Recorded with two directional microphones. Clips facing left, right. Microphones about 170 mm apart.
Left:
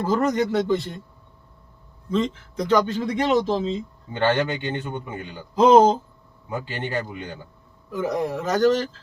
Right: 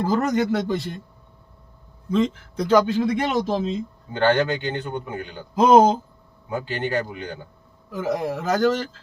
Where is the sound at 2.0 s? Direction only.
10° right (ahead or behind).